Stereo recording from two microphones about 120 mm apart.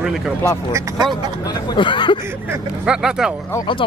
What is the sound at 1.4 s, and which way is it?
Speech, 40° left (ahead or behind).